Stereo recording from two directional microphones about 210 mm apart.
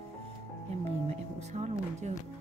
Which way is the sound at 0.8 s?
30° right (ahead or behind).